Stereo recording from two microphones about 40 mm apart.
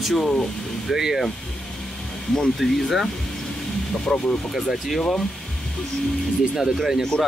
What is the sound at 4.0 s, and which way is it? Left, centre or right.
Speech, centre.